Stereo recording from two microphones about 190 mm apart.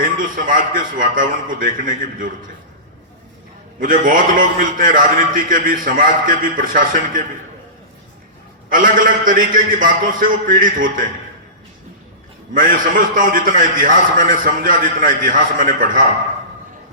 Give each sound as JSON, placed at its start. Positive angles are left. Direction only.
{"t": 0.0, "sound": "a man's voice", "side_deg": -45}
{"t": 3.8, "sound": "a man's voice", "side_deg": -45}
{"t": 8.7, "sound": "a man's voice", "side_deg": -45}
{"t": 12.5, "sound": "a man's voice", "side_deg": -45}